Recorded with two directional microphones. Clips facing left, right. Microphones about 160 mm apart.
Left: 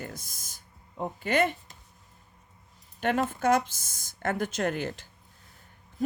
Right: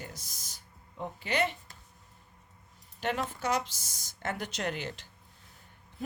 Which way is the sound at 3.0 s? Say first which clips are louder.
Left 6 dB; 50° left (ahead or behind).